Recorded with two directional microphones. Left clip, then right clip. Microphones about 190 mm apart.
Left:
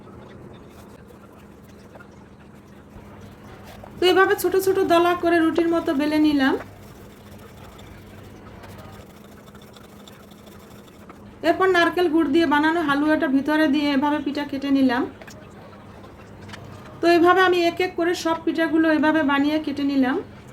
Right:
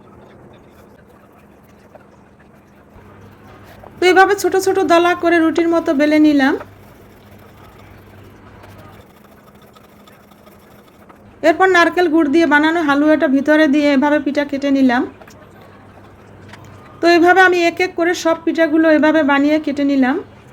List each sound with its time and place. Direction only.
4.0 s speech: 30° right (ahead or behind)
11.3 s speech: 30° right (ahead or behind)
17.0 s speech: 30° right (ahead or behind)